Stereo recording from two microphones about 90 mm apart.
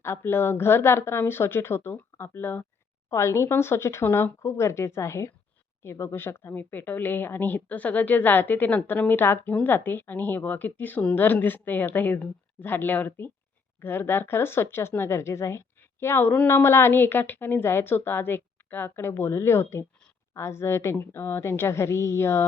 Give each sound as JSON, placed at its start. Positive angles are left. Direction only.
{"t": 0.0, "sound": "a woman's voice", "side_deg": 30}